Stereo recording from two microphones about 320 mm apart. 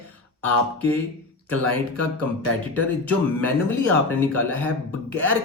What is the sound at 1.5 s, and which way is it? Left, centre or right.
Speech, right.